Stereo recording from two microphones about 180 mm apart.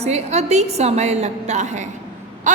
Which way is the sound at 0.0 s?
40° right (ahead or behind).